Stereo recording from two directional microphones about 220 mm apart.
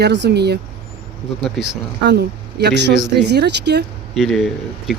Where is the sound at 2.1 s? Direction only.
50° right (ahead or behind).